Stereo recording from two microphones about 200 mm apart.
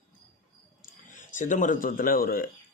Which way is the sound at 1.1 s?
40° left (ahead or behind).